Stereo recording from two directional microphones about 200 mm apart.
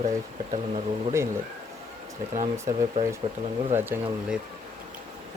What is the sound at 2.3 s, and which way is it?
Speech, 40° right (ahead or behind).